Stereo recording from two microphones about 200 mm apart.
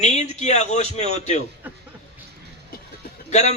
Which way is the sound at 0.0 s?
35° left (ahead or behind).